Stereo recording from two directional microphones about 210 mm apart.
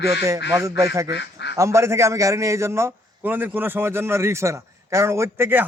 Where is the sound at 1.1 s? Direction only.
55° left (ahead or behind).